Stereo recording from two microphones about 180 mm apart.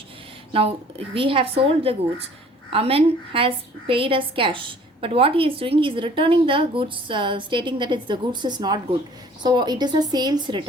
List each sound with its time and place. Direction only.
0.5 s a woman's voice: 30° right (ahead or behind)